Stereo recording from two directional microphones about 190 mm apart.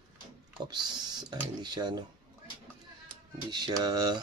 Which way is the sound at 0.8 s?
20° right (ahead or behind).